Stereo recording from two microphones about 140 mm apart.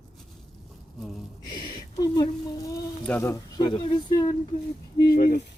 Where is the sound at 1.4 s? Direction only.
30° left (ahead or behind).